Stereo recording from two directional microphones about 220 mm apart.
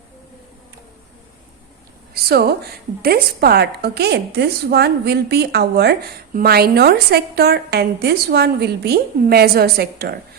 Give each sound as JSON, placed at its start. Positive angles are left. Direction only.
{"t": 2.3, "sound": "a woman's voice", "side_deg": -45}